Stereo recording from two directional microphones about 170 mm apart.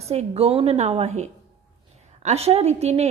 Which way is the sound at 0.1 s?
35° right (ahead or behind).